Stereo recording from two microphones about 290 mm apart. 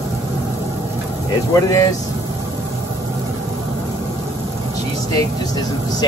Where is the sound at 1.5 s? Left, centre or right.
Centre.